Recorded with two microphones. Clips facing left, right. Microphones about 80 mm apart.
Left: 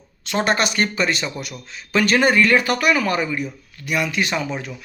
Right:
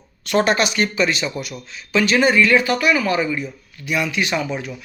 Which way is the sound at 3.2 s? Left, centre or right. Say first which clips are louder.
Right 2 dB; centre.